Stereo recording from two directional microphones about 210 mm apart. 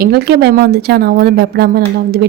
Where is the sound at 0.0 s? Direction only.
50° right (ahead or behind).